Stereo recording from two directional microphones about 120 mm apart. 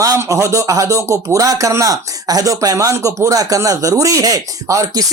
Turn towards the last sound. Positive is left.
turn(degrees=-30)  # may be behind; listen again after turning